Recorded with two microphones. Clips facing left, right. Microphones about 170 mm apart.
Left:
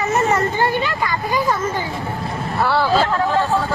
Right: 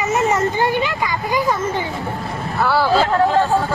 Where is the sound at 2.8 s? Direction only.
15° right (ahead or behind).